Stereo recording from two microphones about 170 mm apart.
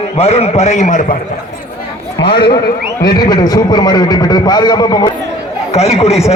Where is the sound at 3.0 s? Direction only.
25° left (ahead or behind).